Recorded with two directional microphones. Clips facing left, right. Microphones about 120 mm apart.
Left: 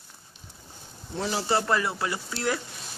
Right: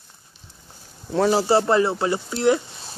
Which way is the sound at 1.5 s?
30° right (ahead or behind).